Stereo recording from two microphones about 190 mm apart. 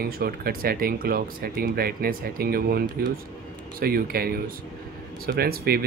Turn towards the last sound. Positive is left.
turn(degrees=-55)  # may be behind; listen again after turning